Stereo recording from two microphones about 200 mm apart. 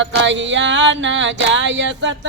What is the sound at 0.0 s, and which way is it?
Music, 65° right (ahead or behind).